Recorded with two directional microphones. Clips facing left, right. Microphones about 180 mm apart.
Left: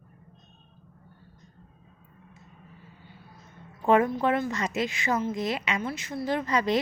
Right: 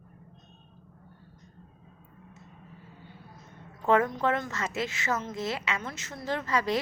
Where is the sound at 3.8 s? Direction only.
15° left (ahead or behind).